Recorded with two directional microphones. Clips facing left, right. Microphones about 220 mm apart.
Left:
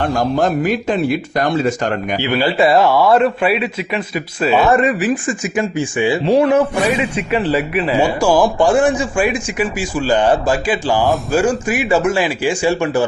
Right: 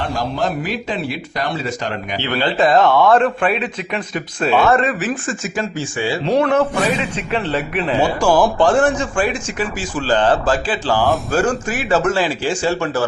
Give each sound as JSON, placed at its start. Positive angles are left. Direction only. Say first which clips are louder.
{"t": 0.0, "sound": "speech", "louder": "left 5 dB", "side_deg": 45}
{"t": 2.2, "sound": "a man's voice", "louder": "left 2 dB", "side_deg": 10}
{"t": 4.6, "sound": "a man's voice", "louder": "left 2 dB", "side_deg": 15}
{"t": 6.2, "sound": "a man's voice", "louder": "left 2 dB", "side_deg": 5}